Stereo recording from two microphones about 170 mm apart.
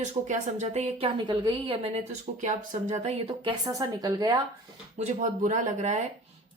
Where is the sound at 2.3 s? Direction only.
45° right (ahead or behind).